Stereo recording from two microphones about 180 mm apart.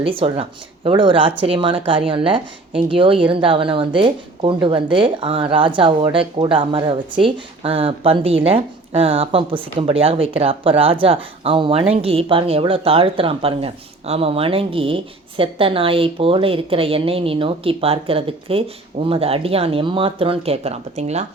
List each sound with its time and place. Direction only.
0.0 s a woman's voice: 30° right (ahead or behind)